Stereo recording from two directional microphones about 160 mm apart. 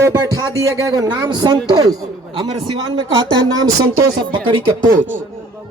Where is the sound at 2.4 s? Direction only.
35° right (ahead or behind).